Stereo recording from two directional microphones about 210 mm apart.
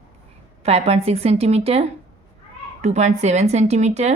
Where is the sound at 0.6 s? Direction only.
30° right (ahead or behind).